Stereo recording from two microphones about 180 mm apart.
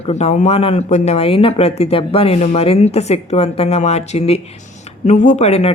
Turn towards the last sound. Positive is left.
turn(degrees=35)  # may be behind; listen again after turning